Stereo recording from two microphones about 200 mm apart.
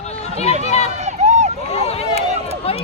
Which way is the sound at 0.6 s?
35° left (ahead or behind).